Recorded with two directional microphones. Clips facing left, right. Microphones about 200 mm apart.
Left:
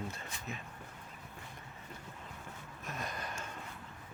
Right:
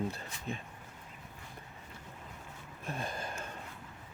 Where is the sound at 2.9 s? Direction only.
30° right (ahead or behind).